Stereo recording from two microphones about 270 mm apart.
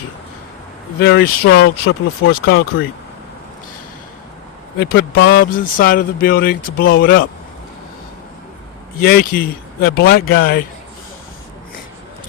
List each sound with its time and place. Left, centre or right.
1.0 s speech: left
2.3 s speech: left
4.8 s speech: left
9.0 s speech: left